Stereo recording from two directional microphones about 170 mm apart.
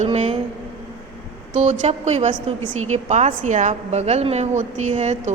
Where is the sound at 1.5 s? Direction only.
45° right (ahead or behind).